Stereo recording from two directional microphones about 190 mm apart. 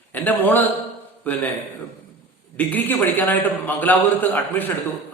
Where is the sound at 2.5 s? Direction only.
10° left (ahead or behind).